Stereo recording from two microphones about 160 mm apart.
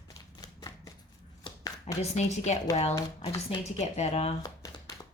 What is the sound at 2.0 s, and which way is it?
Speech, 45° left (ahead or behind).